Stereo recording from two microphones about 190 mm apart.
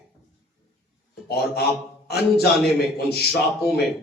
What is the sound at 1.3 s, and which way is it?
A man's voice, 55° left (ahead or behind).